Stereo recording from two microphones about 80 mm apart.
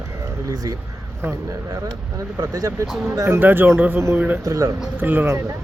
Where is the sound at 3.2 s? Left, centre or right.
Right.